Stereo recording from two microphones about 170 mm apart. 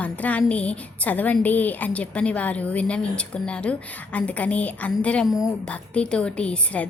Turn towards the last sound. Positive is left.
turn(degrees=5)  # may be behind; listen again after turning